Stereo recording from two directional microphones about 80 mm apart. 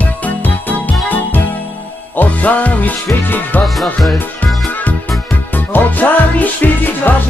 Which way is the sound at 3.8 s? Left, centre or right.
Centre.